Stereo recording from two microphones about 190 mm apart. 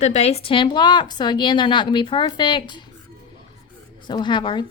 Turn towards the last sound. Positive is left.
turn(degrees=25)  # may be behind; listen again after turning